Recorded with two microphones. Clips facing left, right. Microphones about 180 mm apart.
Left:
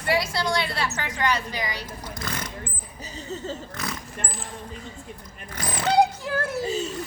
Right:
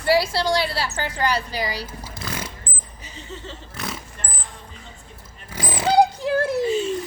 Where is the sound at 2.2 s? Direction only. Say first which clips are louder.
Right 2 dB; 5° right (ahead or behind).